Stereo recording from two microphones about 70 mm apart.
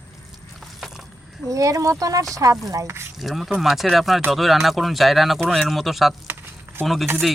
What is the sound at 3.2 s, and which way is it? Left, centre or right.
Speech, centre.